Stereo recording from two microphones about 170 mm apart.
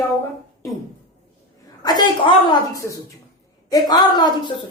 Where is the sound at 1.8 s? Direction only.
25° left (ahead or behind).